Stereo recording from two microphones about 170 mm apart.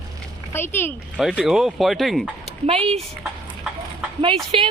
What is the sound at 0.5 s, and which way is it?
Speech, 15° left (ahead or behind).